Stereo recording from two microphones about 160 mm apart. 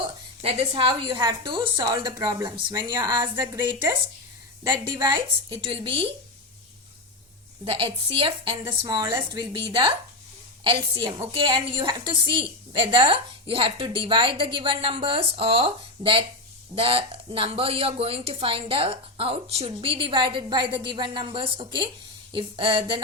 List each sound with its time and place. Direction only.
0.4 s a woman's voice: 40° right (ahead or behind)
5.7 s a woman's voice: 35° right (ahead or behind)
7.6 s a woman's voice: 35° right (ahead or behind)